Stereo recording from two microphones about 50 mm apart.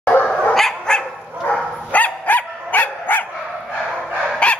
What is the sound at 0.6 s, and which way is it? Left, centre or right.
Dog, centre.